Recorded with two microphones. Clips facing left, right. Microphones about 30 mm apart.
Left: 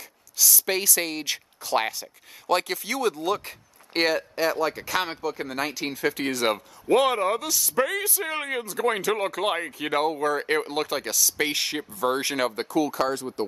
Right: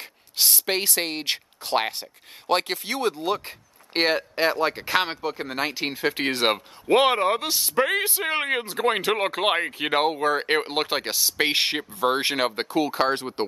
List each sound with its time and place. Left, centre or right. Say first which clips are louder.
0.4 s speech: right 1 dB; right